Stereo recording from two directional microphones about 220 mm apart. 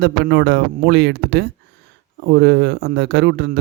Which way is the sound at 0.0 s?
50° right (ahead or behind).